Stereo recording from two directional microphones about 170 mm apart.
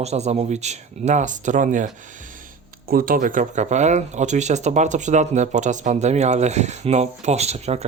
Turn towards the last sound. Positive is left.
turn(degrees=-40)  # may be behind; listen again after turning